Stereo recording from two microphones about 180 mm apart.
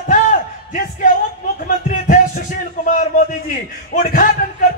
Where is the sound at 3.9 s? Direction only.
50° left (ahead or behind).